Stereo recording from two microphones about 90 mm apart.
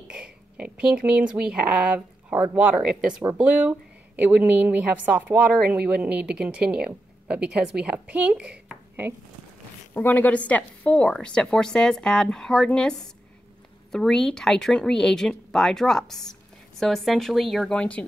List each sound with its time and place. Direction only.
0.1 s speech: 10° right (ahead or behind)
9.9 s a woman's voice: 20° left (ahead or behind)
13.9 s speech: 5° left (ahead or behind)
17.7 s a woman's voice: 15° left (ahead or behind)